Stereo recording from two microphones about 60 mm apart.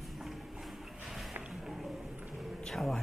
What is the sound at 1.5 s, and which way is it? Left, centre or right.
Music, centre.